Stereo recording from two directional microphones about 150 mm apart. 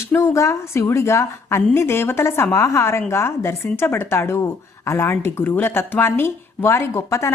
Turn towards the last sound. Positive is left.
turn(degrees=15)  # may be behind; listen again after turning